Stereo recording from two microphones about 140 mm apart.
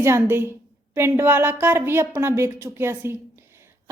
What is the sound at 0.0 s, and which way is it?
A woman's voice, 20° right (ahead or behind).